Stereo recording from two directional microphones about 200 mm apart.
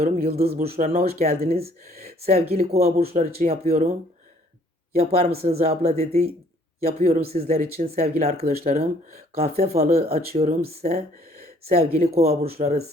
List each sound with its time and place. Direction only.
0.2 s speech: 30° right (ahead or behind)
0.5 s speech: 50° right (ahead or behind)
1.2 s speech: 35° right (ahead or behind)
1.8 s speech: 50° right (ahead or behind)
2.2 s speech: 30° right (ahead or behind)
4.9 s speech: 30° right (ahead or behind)
9.4 s speech: 30° right (ahead or behind)
10.5 s speech: 50° right (ahead or behind)
11.7 s speech: 30° right (ahead or behind)